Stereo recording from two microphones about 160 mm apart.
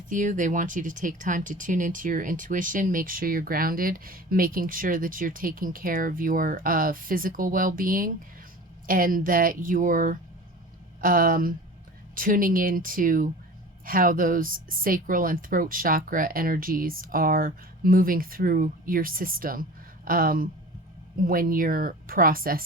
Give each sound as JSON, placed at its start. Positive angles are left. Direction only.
{"t": 0.1, "sound": "speech", "side_deg": -55}